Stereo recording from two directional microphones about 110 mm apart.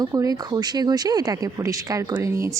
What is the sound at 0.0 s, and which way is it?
Speech, 30° right (ahead or behind).